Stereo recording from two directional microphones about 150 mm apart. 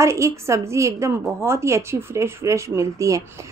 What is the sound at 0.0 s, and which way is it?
A woman's voice, 20° right (ahead or behind).